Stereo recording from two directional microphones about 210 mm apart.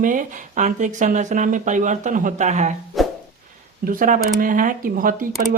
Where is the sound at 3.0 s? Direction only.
Centre (ahead or behind).